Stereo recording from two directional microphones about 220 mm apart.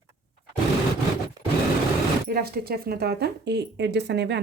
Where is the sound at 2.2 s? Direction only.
45° right (ahead or behind).